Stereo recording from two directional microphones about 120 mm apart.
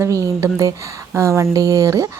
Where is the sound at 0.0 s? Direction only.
25° right (ahead or behind).